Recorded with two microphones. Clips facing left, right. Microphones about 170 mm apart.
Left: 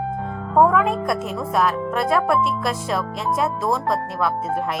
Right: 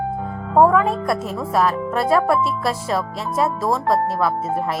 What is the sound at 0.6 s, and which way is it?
Speech, centre (ahead or behind).